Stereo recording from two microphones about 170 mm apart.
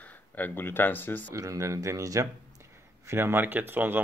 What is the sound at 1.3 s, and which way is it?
Speech, 20° right (ahead or behind).